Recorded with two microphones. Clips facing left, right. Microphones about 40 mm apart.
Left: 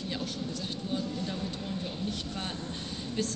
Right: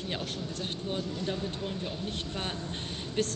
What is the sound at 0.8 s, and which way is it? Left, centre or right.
Speech, right.